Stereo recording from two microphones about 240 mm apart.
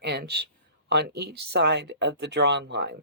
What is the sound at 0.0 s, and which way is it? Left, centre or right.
Speech, right.